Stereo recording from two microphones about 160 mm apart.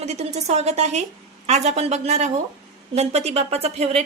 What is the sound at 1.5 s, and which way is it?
Speech, 45° right (ahead or behind).